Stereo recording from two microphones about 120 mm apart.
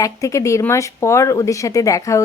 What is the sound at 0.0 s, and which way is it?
Speech, 25° left (ahead or behind).